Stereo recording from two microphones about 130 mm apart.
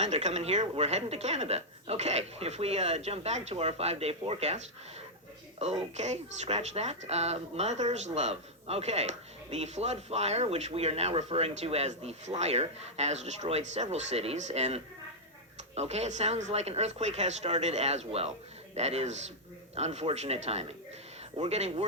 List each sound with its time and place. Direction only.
0.0 s speech: 60° right (ahead or behind)